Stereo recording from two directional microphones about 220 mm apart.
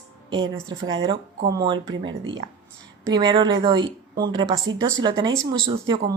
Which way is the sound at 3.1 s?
20° right (ahead or behind).